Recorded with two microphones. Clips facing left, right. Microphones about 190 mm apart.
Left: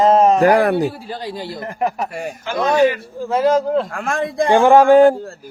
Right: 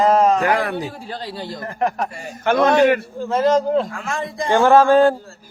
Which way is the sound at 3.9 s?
55° left (ahead or behind).